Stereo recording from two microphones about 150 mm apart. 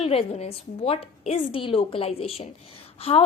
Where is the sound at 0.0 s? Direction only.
40° left (ahead or behind).